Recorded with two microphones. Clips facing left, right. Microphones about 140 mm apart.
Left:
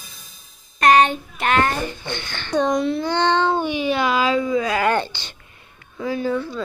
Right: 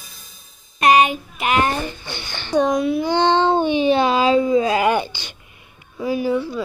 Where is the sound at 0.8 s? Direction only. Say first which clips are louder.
Even; 15° right (ahead or behind).